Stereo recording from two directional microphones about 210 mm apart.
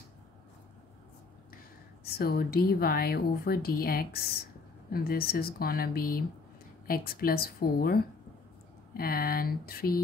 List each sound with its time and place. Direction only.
2.0 s a woman's voice: 45° left (ahead or behind)